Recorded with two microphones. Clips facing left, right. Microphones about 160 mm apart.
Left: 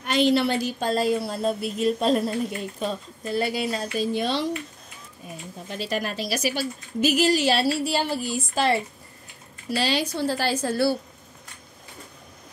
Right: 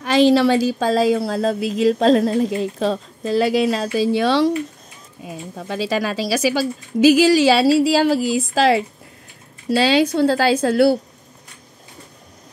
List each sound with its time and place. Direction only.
0.0 s speech: 90° right
9.8 s a woman's voice: 75° right (ahead or behind)